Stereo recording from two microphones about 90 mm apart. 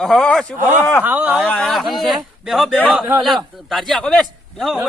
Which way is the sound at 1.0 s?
20° right (ahead or behind).